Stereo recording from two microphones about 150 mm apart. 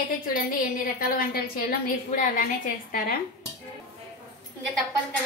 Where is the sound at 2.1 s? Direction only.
60° left (ahead or behind).